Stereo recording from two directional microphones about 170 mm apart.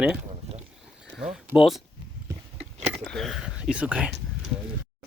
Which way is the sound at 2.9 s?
Centre (ahead or behind).